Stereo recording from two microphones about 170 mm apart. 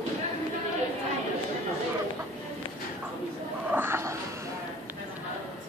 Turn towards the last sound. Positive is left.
turn(degrees=-15)  # may be behind; listen again after turning